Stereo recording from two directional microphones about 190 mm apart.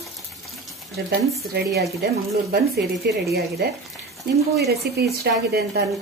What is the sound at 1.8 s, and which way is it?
Speech, 60° right (ahead or behind).